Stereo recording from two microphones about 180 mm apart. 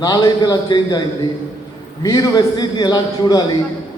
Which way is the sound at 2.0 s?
20° left (ahead or behind).